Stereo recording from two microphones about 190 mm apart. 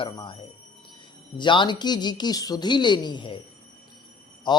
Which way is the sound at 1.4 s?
25° left (ahead or behind).